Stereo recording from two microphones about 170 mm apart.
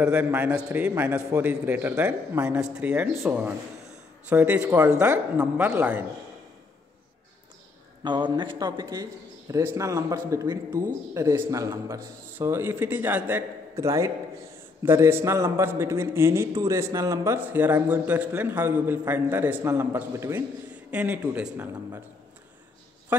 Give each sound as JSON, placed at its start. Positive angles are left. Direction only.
{"t": 0.0, "sound": "a man's voice", "side_deg": -10}
{"t": 8.0, "sound": "a man's voice", "side_deg": -25}